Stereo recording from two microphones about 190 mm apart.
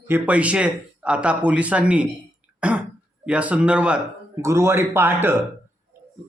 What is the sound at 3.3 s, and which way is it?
A man's voice, 5° right (ahead or behind).